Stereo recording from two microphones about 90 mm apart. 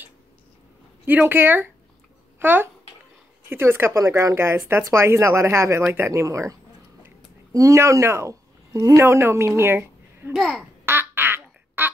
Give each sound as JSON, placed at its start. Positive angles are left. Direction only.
{"t": 1.0, "sound": "a child's voice", "side_deg": -20}
{"t": 10.3, "sound": "a child's voice", "side_deg": 0}
{"t": 10.9, "sound": "quack", "side_deg": -25}